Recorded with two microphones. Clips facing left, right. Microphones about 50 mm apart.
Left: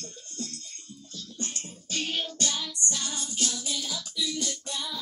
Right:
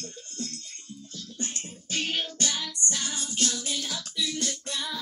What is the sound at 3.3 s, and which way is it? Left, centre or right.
Music, right.